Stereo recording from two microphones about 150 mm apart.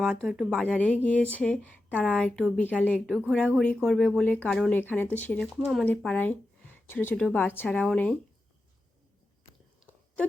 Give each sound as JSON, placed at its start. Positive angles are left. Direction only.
{"t": 0.0, "sound": "speech", "side_deg": -5}
{"t": 0.8, "sound": "speech", "side_deg": 10}
{"t": 3.2, "sound": "speech", "side_deg": -5}
{"t": 5.5, "sound": "speech", "side_deg": -5}
{"t": 6.0, "sound": "speech", "side_deg": 10}